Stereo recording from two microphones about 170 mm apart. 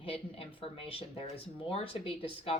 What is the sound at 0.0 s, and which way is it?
Speech, 35° left (ahead or behind).